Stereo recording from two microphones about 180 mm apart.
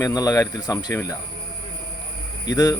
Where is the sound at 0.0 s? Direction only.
20° left (ahead or behind).